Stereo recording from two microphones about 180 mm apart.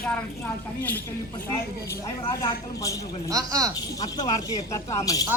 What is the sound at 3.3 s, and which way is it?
Speech, 20° right (ahead or behind).